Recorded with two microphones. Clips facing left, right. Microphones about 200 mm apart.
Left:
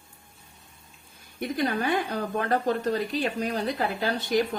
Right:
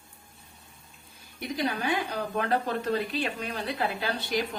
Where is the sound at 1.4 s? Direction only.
50° left (ahead or behind).